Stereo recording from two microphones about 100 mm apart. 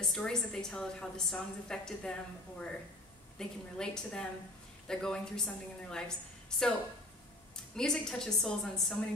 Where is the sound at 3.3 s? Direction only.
5° left (ahead or behind).